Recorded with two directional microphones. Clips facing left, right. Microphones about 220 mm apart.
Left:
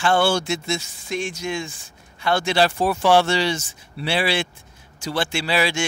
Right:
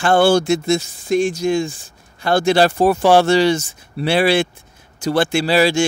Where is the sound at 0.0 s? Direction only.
45° right (ahead or behind).